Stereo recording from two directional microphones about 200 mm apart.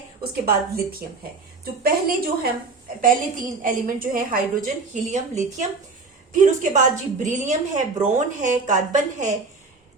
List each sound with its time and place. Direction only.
0.2 s a woman's voice: 50° right (ahead or behind)